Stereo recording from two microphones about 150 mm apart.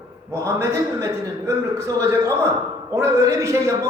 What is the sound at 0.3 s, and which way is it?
A man's voice, 20° right (ahead or behind).